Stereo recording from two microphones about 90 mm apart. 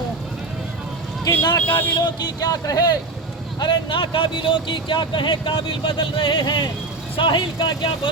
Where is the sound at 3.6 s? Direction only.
65° left (ahead or behind).